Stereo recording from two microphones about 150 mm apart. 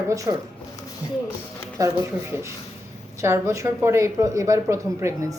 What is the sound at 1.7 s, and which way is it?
Speech, 20° right (ahead or behind).